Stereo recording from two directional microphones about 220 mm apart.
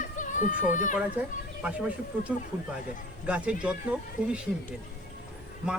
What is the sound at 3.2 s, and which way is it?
Speech, 5° right (ahead or behind).